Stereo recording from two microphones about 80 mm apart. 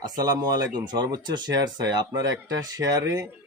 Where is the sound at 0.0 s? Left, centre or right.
Right.